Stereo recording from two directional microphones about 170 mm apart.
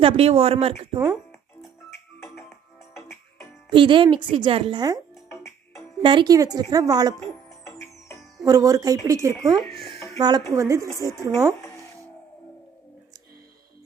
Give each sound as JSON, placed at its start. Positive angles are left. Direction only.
{"t": 0.0, "sound": "speech", "side_deg": -35}
{"t": 0.9, "sound": "a woman's voice", "side_deg": -5}
{"t": 3.7, "sound": "speech", "side_deg": -30}
{"t": 6.0, "sound": "speech", "side_deg": -30}
{"t": 8.4, "sound": "a woman's voice", "side_deg": -20}
{"t": 9.6, "sound": "speech", "side_deg": 0}
{"t": 10.2, "sound": "a woman's voice", "side_deg": -25}
{"t": 11.6, "sound": "music", "side_deg": 15}